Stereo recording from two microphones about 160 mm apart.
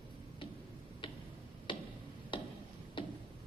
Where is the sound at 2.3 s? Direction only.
30° left (ahead or behind).